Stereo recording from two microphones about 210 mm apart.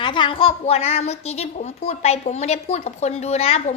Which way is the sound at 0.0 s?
20° left (ahead or behind).